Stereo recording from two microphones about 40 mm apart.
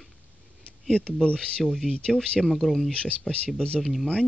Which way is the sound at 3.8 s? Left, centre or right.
Centre.